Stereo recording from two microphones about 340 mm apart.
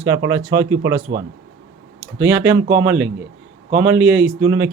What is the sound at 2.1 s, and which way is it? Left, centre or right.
A man's voice, centre.